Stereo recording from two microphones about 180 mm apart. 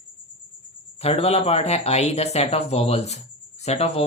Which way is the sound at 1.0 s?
35° left (ahead or behind).